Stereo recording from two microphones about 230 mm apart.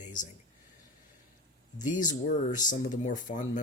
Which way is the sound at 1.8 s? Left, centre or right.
Left.